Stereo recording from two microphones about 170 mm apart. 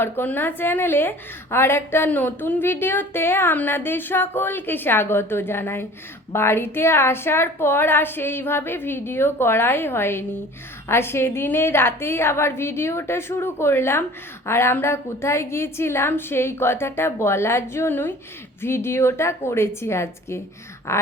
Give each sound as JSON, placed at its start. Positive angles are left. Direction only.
{"t": 0.0, "sound": "a woman's voice", "side_deg": 10}